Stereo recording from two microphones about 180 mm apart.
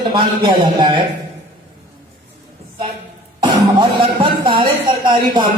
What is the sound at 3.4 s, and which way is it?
A man's voice, 25° right (ahead or behind).